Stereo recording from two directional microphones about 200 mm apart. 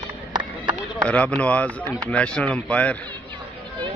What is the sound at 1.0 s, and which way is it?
Speech, 5° left (ahead or behind).